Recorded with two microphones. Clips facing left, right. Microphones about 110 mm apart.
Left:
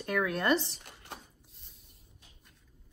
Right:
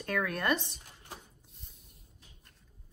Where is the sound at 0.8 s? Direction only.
65° left (ahead or behind).